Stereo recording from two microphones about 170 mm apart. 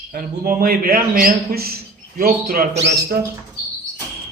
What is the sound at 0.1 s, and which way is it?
A man's voice, 60° right (ahead or behind).